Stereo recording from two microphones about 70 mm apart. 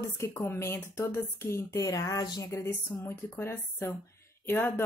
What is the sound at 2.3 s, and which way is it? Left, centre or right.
Speech, left.